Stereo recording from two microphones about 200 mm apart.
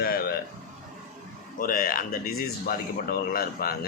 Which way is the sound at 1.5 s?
45° left (ahead or behind).